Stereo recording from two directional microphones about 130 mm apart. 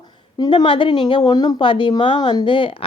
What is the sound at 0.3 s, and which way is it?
A woman's voice, 35° left (ahead or behind).